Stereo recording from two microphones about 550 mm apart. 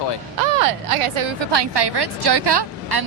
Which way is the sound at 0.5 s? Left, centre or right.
Right.